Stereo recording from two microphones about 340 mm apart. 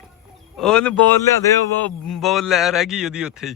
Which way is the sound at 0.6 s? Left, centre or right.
Centre.